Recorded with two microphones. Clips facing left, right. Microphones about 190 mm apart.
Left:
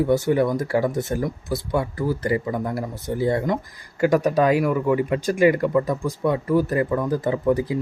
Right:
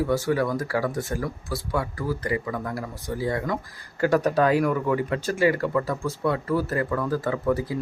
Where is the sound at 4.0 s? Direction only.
10° left (ahead or behind).